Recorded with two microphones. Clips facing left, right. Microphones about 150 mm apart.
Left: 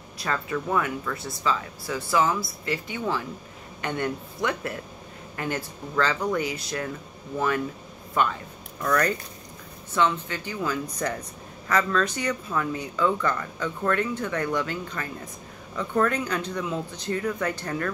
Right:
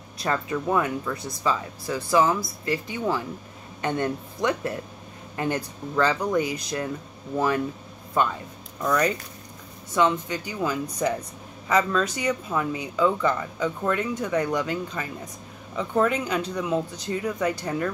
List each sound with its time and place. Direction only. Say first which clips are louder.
0.2 s speech: right 2 dB; 20° right (ahead or behind)
8.8 s speech: right 1 dB; 10° right (ahead or behind)